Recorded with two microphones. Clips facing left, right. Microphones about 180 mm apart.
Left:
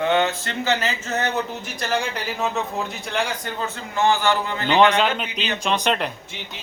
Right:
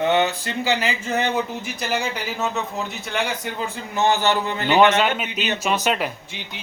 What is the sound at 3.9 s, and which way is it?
Speech, 20° right (ahead or behind).